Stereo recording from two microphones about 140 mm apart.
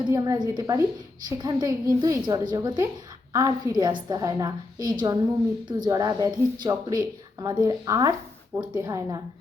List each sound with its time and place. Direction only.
0.0 s speech: 30° right (ahead or behind)